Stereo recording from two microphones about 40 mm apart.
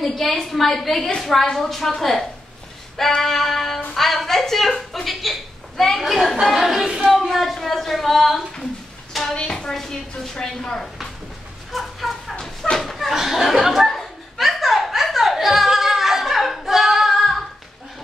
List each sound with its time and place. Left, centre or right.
0.0 s a woman's voice: centre
7.1 s a woman's voice: centre
9.3 s a woman's voice: left
11.7 s a sound: centre
12.9 s a woman's voice: centre
13.9 s a sound: centre
17.1 s singing: centre